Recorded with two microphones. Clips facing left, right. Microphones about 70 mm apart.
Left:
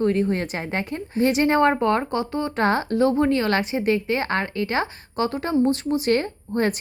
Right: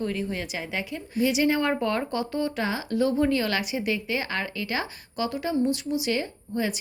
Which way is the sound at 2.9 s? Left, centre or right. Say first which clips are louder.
Left 4 dB; left.